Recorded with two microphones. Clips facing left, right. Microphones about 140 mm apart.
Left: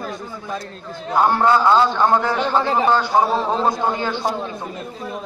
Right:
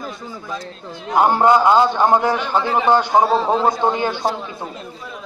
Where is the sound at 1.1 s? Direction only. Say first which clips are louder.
Right 2 dB; 20° right (ahead or behind).